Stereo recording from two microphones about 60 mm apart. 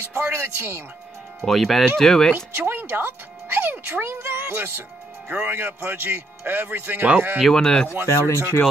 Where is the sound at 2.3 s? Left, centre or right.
Right.